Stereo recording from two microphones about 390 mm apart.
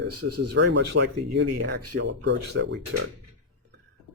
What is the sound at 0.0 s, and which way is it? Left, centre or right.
Speech, right.